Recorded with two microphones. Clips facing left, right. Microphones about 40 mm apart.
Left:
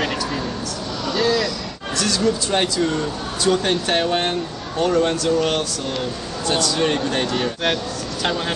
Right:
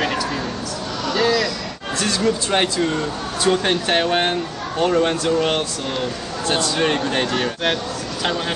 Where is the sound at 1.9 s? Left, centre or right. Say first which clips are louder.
Even; right.